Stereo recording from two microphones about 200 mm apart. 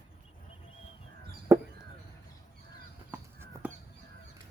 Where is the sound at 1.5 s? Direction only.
10° right (ahead or behind).